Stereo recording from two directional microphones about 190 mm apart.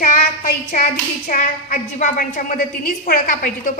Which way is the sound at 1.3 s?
45° left (ahead or behind).